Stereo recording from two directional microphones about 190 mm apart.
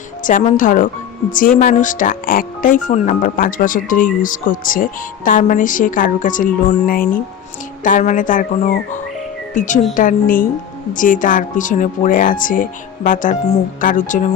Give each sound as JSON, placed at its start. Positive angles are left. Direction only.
{"t": 0.2, "sound": "speech", "side_deg": 45}